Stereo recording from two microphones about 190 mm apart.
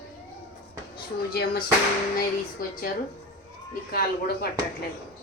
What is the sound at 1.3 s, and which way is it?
Music, 50° left (ahead or behind).